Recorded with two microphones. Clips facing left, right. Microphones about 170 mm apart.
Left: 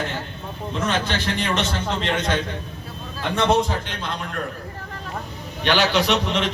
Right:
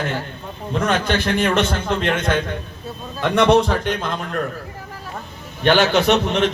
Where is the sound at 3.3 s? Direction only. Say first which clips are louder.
Right 5 dB; 70° right (ahead or behind).